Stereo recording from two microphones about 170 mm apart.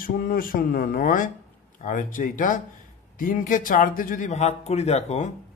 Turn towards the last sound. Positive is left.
turn(degrees=40)  # may be behind; listen again after turning